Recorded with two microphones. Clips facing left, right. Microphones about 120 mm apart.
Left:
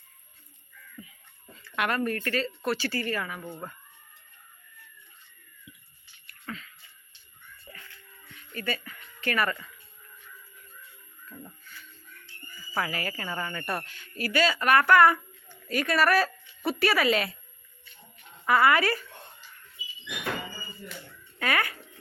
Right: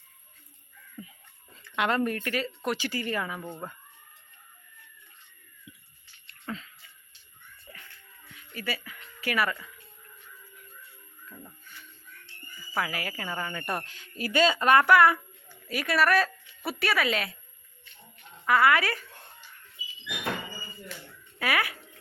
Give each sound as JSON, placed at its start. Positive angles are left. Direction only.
{"t": 1.0, "sound": "speech", "side_deg": -30}
{"t": 6.2, "sound": "a sound", "side_deg": -25}
{"t": 8.5, "sound": "speech", "side_deg": -5}
{"t": 11.3, "sound": "speech", "side_deg": -10}
{"t": 12.7, "sound": "speech", "side_deg": -5}
{"t": 14.8, "sound": "a woman's voice", "side_deg": -5}
{"t": 18.4, "sound": "speech", "side_deg": 0}
{"t": 21.3, "sound": "speech", "side_deg": -5}